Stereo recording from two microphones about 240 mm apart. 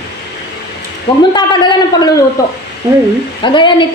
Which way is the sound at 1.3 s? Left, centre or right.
Centre.